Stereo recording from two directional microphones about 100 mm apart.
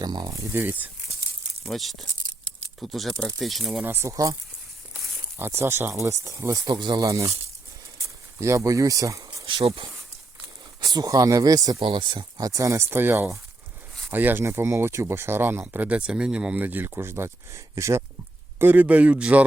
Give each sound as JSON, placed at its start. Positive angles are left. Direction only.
{"t": 0.0, "sound": "speech", "side_deg": -45}
{"t": 0.3, "sound": "speech", "side_deg": -30}
{"t": 1.6, "sound": "speech", "side_deg": 0}
{"t": 3.8, "sound": "speech", "side_deg": -20}
{"t": 4.1, "sound": "speech", "side_deg": -35}
{"t": 4.9, "sound": "a sound", "side_deg": 0}
{"t": 5.4, "sound": "speech", "side_deg": -25}
{"t": 6.7, "sound": "speech", "side_deg": -50}
{"t": 7.0, "sound": "speech", "side_deg": -35}
{"t": 7.9, "sound": "a sound", "side_deg": -30}
{"t": 9.6, "sound": "speech", "side_deg": -65}
{"t": 10.8, "sound": "speech", "side_deg": -40}
{"t": 11.8, "sound": "speech", "side_deg": -55}
{"t": 18.6, "sound": "speech", "side_deg": -15}